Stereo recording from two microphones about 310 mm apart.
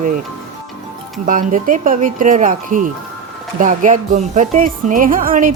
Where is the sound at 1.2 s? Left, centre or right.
Right.